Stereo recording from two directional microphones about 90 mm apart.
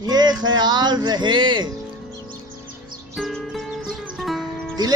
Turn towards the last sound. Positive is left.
turn(degrees=0)  # may be behind; listen again after turning